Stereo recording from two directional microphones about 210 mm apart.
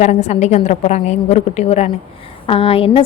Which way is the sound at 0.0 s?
35° left (ahead or behind).